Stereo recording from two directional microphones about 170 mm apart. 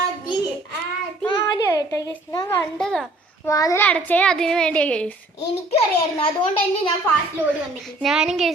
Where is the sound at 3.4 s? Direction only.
20° left (ahead or behind).